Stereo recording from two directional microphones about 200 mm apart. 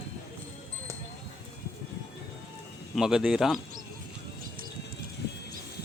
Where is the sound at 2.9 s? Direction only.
5° right (ahead or behind).